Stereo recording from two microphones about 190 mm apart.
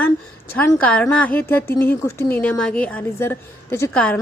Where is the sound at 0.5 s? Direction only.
5° left (ahead or behind).